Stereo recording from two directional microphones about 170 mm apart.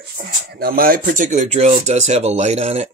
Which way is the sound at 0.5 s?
60° right (ahead or behind).